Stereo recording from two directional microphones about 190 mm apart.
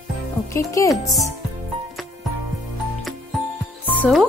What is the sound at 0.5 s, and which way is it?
Speech, 15° left (ahead or behind).